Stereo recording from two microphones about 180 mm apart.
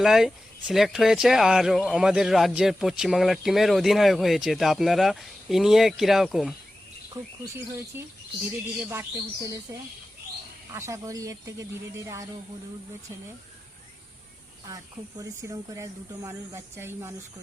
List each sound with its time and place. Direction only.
0.0 s speech: centre (ahead or behind)
7.1 s speech: 15° right (ahead or behind)
10.7 s speech: 15° right (ahead or behind)
15.2 s speech: 20° right (ahead or behind)